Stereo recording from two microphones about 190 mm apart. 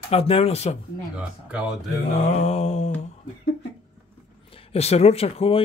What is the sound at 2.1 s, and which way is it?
Speech, 35° left (ahead or behind).